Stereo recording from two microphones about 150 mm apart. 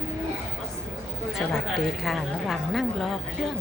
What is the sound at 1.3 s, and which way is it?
A woman's voice, centre (ahead or behind).